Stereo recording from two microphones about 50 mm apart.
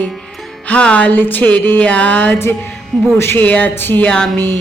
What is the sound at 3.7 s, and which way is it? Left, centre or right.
Speech, left.